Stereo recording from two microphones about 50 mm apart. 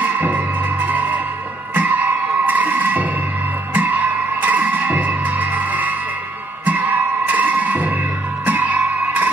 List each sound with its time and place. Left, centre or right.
0.0 s music: right